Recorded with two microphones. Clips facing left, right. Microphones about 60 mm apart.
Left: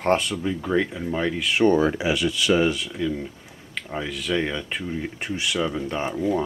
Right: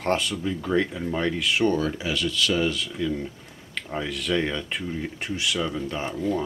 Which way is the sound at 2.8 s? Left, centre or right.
Centre.